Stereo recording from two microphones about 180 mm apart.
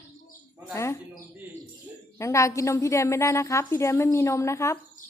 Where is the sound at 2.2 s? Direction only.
15° left (ahead or behind).